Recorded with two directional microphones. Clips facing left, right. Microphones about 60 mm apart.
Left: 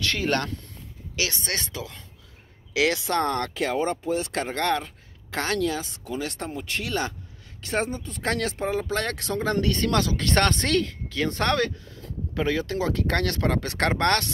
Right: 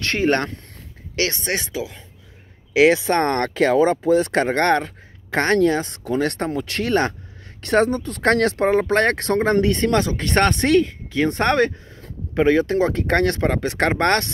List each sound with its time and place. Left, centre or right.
0.0 s speech: right
1.1 s speech: right
1.4 s speech: centre
2.7 s speech: right
3.2 s speech: right
6.9 s speech: right
7.6 s speech: right